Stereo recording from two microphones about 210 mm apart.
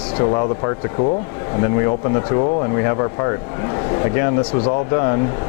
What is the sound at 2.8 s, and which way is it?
Speech, 20° left (ahead or behind).